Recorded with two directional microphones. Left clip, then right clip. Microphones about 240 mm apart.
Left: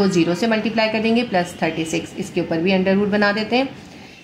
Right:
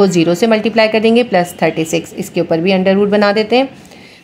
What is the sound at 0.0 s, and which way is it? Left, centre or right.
A woman's voice, right.